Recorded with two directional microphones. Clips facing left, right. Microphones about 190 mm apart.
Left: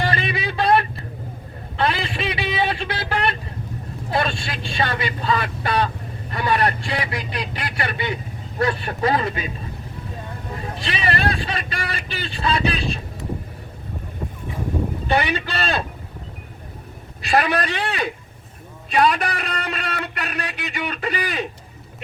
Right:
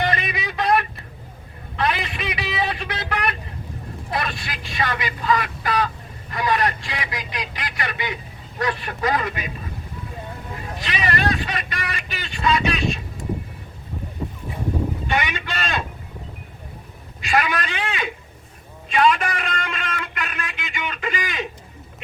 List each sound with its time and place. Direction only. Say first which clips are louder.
0.0 s a sound: left 1 dB; 30° left (ahead or behind)
4.1 s vehicle: left 4 dB; 30° left (ahead or behind)
6.3 s speech: left 1 dB; 30° left (ahead or behind)
10.8 s vehicle: even; 30° left (ahead or behind)
15.0 s a man's voice: left 4 dB; 35° left (ahead or behind)
17.2 s a man's voice: left 3 dB; 35° left (ahead or behind)